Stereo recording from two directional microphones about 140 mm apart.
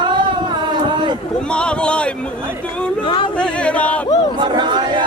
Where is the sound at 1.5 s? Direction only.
5° left (ahead or behind).